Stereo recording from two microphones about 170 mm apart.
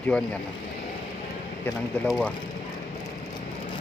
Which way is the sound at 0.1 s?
5° left (ahead or behind).